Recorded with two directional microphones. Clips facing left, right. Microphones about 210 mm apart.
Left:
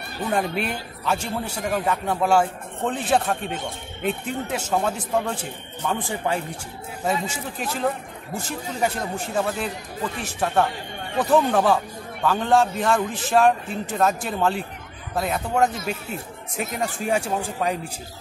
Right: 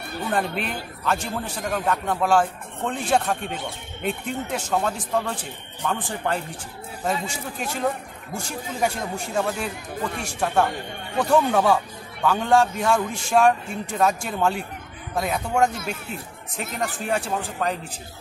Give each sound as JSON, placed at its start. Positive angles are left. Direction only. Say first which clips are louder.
{"t": 0.3, "sound": "a man's voice", "louder": "left 2 dB", "side_deg": 5}